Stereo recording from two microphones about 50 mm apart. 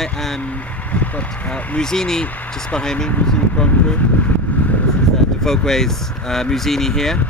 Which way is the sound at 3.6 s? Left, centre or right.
Left.